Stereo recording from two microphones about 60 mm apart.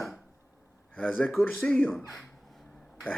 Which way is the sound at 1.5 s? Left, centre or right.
Centre.